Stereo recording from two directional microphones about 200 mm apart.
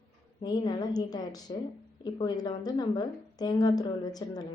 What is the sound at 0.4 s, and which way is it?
A woman's voice, 20° left (ahead or behind).